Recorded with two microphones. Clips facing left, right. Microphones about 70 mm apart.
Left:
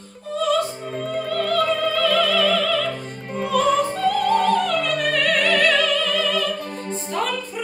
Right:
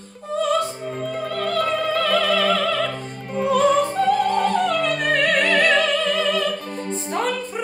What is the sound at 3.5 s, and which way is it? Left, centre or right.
Opera, centre.